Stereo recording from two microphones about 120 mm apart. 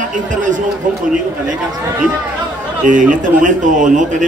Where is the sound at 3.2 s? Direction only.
90° right.